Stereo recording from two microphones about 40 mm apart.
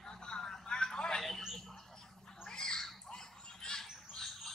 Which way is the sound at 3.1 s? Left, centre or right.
Centre.